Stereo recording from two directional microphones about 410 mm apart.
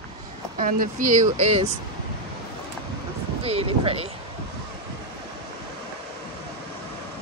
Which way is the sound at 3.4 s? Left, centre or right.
Centre.